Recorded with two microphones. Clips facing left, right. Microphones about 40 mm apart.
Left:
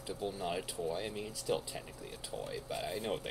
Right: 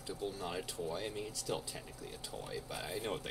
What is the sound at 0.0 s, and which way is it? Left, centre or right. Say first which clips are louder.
Speech: left 2 dB; centre.